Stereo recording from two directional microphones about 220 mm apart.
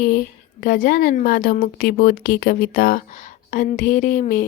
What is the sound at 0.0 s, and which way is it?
A woman's voice, 40° left (ahead or behind).